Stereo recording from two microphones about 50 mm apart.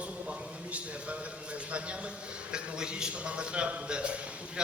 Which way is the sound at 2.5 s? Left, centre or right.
Centre.